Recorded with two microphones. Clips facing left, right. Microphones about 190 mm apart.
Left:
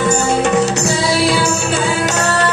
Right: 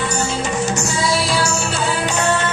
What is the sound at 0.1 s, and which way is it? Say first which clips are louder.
Music: left 7 dB; 60° left (ahead or behind).